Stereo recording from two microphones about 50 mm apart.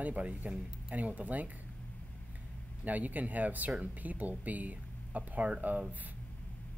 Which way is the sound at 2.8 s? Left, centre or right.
Right.